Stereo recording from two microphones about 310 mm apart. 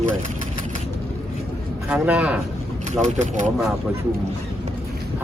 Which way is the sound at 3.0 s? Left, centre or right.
Right.